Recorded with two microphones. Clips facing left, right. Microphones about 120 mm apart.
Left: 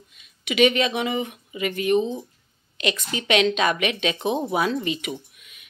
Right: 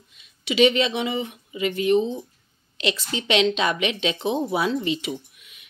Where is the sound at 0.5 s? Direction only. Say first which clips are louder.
Right 1 dB; 25° right (ahead or behind).